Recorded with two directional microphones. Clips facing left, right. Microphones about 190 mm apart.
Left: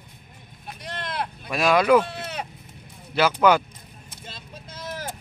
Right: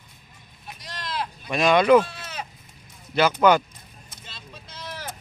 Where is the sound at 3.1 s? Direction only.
5° left (ahead or behind).